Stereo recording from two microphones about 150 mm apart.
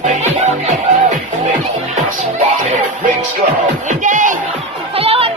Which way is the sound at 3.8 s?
60° right (ahead or behind).